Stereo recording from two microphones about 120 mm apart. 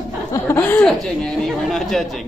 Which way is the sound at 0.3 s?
20° left (ahead or behind).